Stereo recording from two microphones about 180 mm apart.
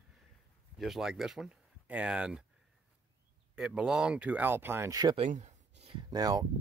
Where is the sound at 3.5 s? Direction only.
5° right (ahead or behind).